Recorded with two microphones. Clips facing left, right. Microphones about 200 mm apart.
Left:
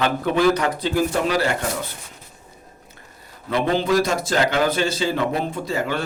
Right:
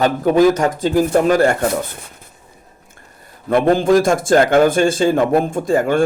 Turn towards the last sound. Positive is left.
turn(degrees=-50)  # may be behind; listen again after turning